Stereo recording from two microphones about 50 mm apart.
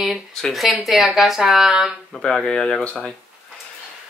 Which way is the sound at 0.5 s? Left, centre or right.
Centre.